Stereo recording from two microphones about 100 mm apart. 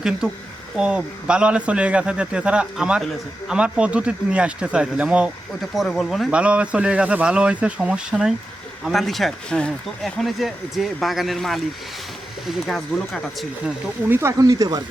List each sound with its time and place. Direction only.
0.8 s a man's voice: 10° right (ahead or behind)
5.7 s speech: centre (ahead or behind)
6.3 s a man's voice: 10° right (ahead or behind)
14.1 s speech: 30° right (ahead or behind)